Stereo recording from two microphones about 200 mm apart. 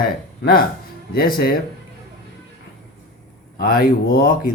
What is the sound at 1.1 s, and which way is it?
Speech, 45° left (ahead or behind).